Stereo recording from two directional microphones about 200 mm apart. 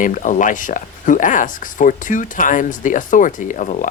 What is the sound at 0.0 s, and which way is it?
Speech, 40° left (ahead or behind).